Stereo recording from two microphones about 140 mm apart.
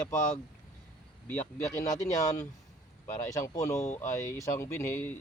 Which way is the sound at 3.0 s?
20° left (ahead or behind).